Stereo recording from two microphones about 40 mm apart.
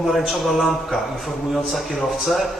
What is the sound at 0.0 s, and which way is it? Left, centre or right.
A man's voice, centre.